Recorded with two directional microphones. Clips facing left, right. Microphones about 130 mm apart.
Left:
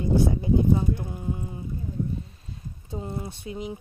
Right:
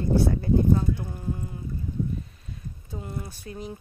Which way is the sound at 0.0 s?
15° left (ahead or behind).